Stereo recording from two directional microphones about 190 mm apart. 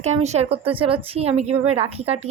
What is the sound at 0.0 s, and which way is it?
Speech, 35° right (ahead or behind).